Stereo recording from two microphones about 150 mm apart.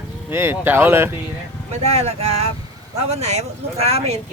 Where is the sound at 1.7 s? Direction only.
45° right (ahead or behind).